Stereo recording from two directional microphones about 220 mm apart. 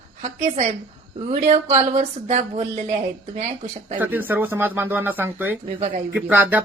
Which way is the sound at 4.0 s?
10° right (ahead or behind).